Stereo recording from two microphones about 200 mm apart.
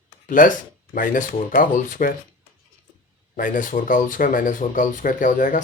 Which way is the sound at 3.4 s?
40° left (ahead or behind).